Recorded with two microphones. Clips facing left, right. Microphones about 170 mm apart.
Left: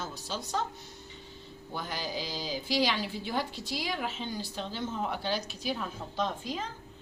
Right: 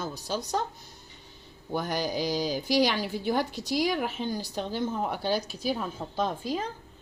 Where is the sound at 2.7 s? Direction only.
45° right (ahead or behind).